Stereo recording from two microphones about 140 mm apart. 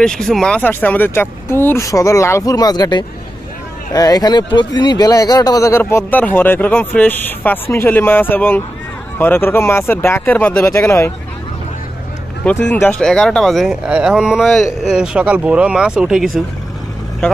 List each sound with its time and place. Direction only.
0.0 s speech: 5° left (ahead or behind); by 11.1 s 20° left (ahead or behind)
12.4 s speech: 15° left (ahead or behind); by 16.3 s 5° right (ahead or behind)
17.2 s speech: 5° left (ahead or behind)